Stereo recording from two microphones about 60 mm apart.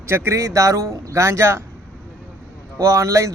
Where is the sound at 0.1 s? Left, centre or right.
Right.